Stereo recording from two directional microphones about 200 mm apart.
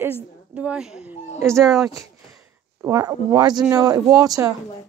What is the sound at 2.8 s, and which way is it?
Speech, 15° right (ahead or behind).